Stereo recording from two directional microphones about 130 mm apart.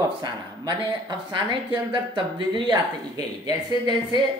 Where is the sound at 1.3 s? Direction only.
40° right (ahead or behind).